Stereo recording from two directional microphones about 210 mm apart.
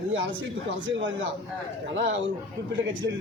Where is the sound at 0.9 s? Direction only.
60° right (ahead or behind).